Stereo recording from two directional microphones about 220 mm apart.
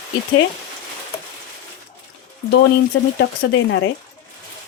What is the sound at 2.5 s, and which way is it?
Speech, 50° left (ahead or behind).